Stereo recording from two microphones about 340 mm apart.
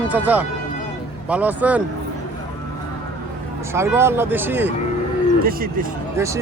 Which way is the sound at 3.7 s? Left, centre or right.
Centre.